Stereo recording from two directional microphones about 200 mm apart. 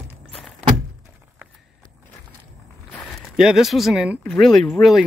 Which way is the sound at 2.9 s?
Centre (ahead or behind).